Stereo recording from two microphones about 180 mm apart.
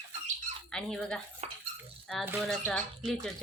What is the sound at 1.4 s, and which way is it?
Speech, 40° right (ahead or behind).